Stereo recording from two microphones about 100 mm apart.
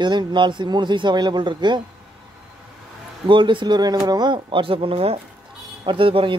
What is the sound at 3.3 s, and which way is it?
A man's voice, 55° right (ahead or behind).